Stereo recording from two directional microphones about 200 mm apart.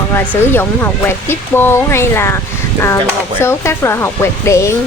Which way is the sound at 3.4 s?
15° left (ahead or behind).